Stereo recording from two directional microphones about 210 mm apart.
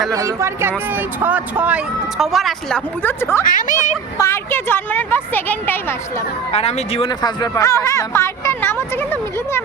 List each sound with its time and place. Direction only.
0.1 s speech: 15° right (ahead or behind); by 3.4 s 10° left (ahead or behind)
3.4 s speech: 40° left (ahead or behind)
4.2 s speech: 10° left (ahead or behind)
6.5 s speech: 30° left (ahead or behind); by 9.0 s 10° left (ahead or behind)